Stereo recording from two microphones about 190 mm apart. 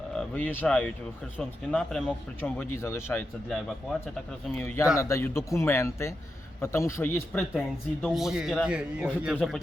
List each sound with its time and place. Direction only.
0.1 s speech: 5° left (ahead or behind)
8.0 s a man's voice: centre (ahead or behind)